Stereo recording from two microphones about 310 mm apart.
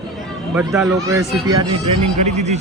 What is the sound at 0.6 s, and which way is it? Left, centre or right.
Speech, centre.